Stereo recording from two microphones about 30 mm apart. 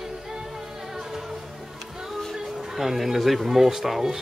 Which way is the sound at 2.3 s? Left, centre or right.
Centre.